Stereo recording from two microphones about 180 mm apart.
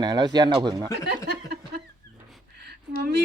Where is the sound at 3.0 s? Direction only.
65° right (ahead or behind).